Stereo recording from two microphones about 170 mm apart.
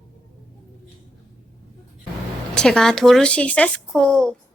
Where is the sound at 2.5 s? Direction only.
5° left (ahead or behind).